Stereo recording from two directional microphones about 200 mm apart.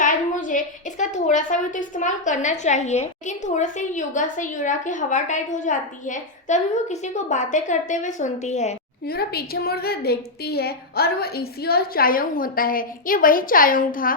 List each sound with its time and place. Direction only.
0.0 s a woman's voice: 40° left (ahead or behind)
9.0 s a woman's voice: 50° left (ahead or behind)